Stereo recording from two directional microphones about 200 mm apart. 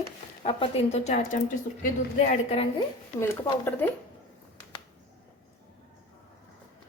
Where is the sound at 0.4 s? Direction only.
30° left (ahead or behind).